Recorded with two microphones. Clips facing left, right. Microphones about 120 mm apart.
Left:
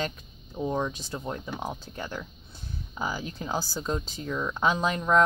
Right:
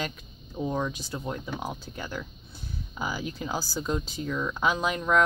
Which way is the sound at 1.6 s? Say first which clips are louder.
Left 1 dB; 5° right (ahead or behind).